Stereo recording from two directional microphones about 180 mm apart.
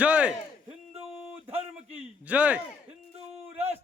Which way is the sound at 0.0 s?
5° right (ahead or behind).